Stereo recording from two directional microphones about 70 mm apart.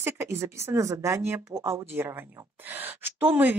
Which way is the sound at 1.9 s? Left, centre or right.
Right.